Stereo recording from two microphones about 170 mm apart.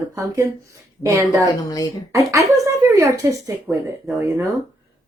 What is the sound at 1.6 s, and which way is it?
Speech, 20° left (ahead or behind).